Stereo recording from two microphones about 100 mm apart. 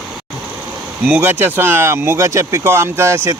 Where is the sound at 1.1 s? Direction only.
20° right (ahead or behind).